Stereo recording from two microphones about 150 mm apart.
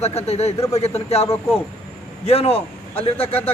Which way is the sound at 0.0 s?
45° left (ahead or behind).